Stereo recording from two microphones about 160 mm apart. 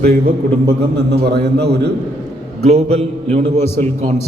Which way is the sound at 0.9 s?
90° right.